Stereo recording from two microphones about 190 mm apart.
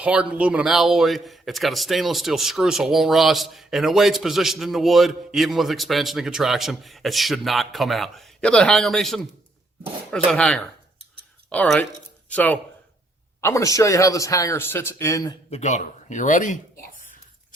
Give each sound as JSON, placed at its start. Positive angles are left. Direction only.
{"t": 0.0, "sound": "speech", "side_deg": -5}
{"t": 10.2, "sound": "speech", "side_deg": 5}
{"t": 15.4, "sound": "a man's voice", "side_deg": 35}